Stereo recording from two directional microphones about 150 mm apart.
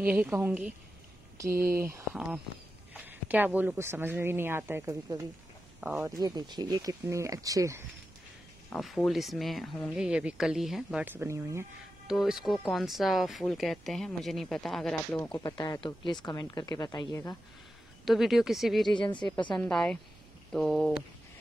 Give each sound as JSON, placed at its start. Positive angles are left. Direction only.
{"t": 0.0, "sound": "a woman's voice", "side_deg": -10}
{"t": 2.1, "sound": "speech", "side_deg": -5}
{"t": 6.0, "sound": "speech", "side_deg": -20}
{"t": 8.7, "sound": "speech", "side_deg": 0}
{"t": 12.1, "sound": "speech", "side_deg": 0}
{"t": 15.1, "sound": "speech", "side_deg": 15}
{"t": 18.0, "sound": "speech", "side_deg": 0}